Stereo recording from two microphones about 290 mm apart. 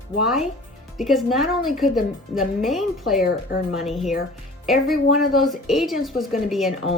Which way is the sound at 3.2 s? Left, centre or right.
Left.